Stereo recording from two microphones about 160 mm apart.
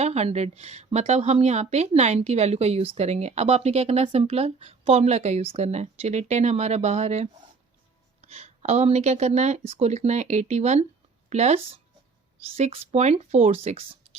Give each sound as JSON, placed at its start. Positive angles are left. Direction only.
{"t": 0.0, "sound": "speech", "side_deg": -40}
{"t": 8.3, "sound": "speech", "side_deg": -40}